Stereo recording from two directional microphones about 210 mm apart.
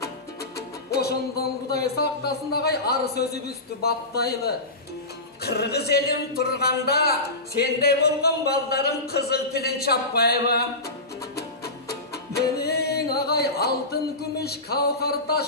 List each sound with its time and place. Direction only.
0.6 s music: 50° left (ahead or behind)
1.4 s speech: 45° left (ahead or behind)
11.3 s music: 50° left (ahead or behind)
14.4 s speech: 50° left (ahead or behind)